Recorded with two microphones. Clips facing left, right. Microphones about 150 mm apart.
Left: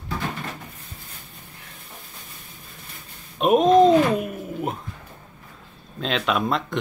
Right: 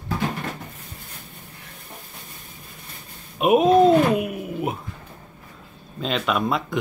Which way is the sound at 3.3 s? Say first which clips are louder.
Even; 5° right (ahead or behind).